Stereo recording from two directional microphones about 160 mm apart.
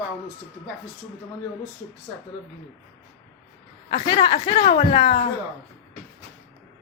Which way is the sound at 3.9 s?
35° left (ahead or behind).